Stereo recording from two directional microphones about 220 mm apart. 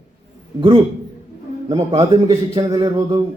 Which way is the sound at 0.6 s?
25° right (ahead or behind).